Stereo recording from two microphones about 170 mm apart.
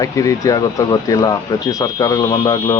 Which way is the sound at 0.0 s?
20° left (ahead or behind).